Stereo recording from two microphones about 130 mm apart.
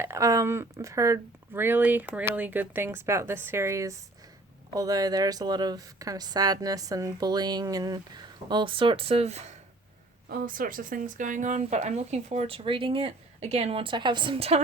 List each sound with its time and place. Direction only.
0.0 s speech: 25° right (ahead or behind); by 9.6 s 55° right (ahead or behind)
10.3 s speech: 90° right; by 11.6 s 70° right (ahead or behind)
11.6 s speech: 60° right (ahead or behind)